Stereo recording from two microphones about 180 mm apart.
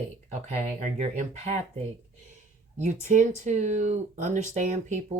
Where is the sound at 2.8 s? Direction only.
45° right (ahead or behind).